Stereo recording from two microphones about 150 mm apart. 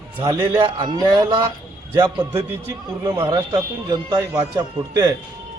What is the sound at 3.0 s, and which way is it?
Speech, 30° right (ahead or behind).